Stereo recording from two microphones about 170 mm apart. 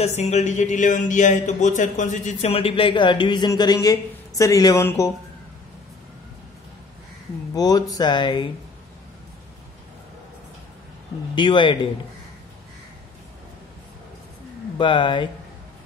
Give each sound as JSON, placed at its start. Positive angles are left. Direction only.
{"t": 0.0, "sound": "speech", "side_deg": 40}
{"t": 7.5, "sound": "speech", "side_deg": 20}
{"t": 11.3, "sound": "speech", "side_deg": 30}
{"t": 14.8, "sound": "speech", "side_deg": 30}